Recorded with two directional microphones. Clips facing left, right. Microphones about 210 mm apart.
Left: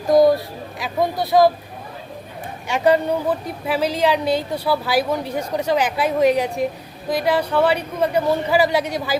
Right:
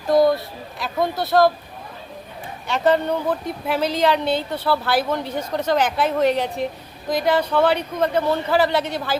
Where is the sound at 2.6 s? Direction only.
10° left (ahead or behind).